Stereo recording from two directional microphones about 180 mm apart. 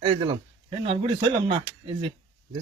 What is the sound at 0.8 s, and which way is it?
Speech, 30° right (ahead or behind).